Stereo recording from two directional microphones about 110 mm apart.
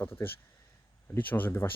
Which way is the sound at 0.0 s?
25° left (ahead or behind).